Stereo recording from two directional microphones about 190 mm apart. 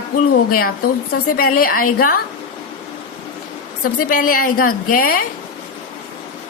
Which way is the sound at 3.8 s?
50° left (ahead or behind).